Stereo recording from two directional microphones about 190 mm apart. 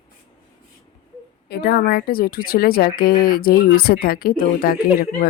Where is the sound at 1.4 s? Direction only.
55° left (ahead or behind).